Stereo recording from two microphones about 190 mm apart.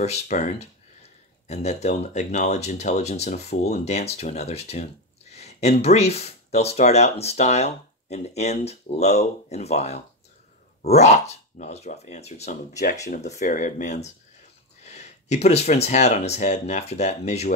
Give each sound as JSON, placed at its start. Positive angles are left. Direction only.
{"t": 0.0, "sound": "speech", "side_deg": 35}